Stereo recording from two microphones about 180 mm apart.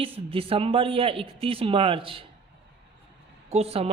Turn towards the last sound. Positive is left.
turn(degrees=-35)  # may be behind; listen again after turning